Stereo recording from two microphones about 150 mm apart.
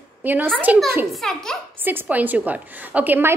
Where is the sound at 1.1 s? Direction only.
Centre (ahead or behind).